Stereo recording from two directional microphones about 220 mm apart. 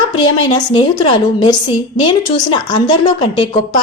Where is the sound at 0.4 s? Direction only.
20° left (ahead or behind).